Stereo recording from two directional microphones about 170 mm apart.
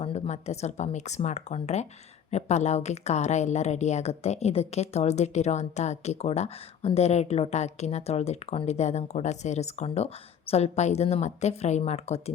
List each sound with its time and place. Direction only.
0.0 s a woman's voice: 40° left (ahead or behind)